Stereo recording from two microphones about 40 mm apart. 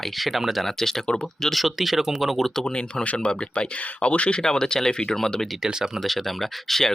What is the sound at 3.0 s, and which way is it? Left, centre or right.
Speech, left.